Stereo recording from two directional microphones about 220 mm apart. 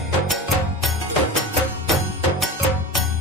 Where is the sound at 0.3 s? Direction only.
Centre (ahead or behind).